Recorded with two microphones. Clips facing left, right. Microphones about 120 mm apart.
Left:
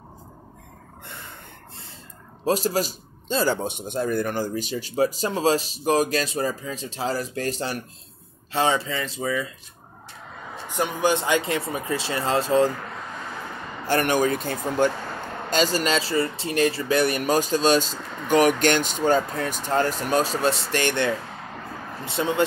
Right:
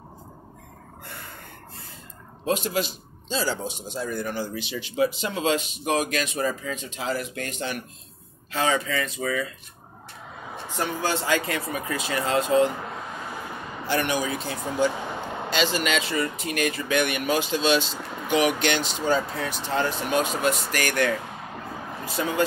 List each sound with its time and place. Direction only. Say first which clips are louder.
2.4 s a man's voice: left 3 dB; 35° left (ahead or behind)
10.7 s a man's voice: left 4 dB; 15° left (ahead or behind); by 12.7 s 35° left (ahead or behind)
13.8 s speech: left 4 dB; 50° left (ahead or behind)
15.0 s a sound: right 1 dB; 15° right (ahead or behind)
15.5 s a man's voice: left 3 dB; 40° left (ahead or behind)
17.9 s speech: even; 10° right (ahead or behind)
18.6 s a man's voice: left 4 dB; 45° left (ahead or behind); by 22.4 s 25° left (ahead or behind)